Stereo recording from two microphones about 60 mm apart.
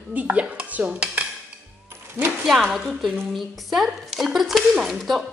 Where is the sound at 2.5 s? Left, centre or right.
Centre.